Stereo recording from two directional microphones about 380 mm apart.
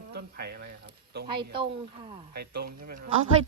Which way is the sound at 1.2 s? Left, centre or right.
Centre.